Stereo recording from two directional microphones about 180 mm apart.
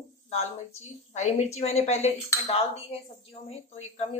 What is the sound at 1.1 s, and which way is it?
Speech, 40° left (ahead or behind).